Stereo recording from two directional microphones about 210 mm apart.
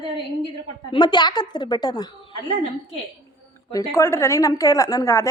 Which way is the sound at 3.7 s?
15° left (ahead or behind).